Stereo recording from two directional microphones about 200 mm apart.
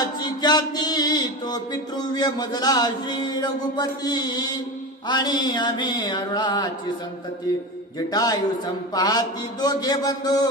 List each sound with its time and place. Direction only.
0.0 s music: 20° left (ahead or behind)
8.1 s music: 20° left (ahead or behind)